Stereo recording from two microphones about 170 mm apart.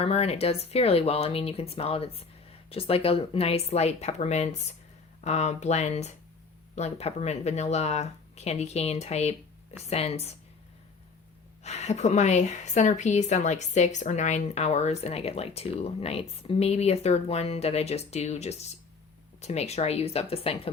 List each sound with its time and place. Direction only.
0.0 s a woman's voice: 35° left (ahead or behind)
11.6 s a woman's voice: 40° left (ahead or behind)